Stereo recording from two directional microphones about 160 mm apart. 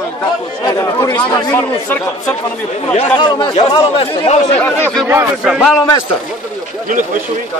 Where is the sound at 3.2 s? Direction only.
30° left (ahead or behind).